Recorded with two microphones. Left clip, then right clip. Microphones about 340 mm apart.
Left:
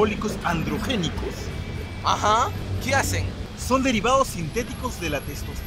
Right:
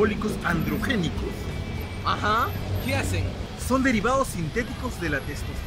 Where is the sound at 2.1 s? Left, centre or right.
Centre.